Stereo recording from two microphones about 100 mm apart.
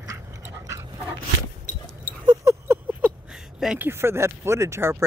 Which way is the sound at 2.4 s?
25° right (ahead or behind).